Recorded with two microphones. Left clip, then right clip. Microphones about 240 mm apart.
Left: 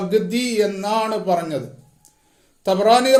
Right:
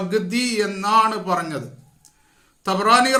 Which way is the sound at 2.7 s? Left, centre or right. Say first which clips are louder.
Left 2 dB; centre.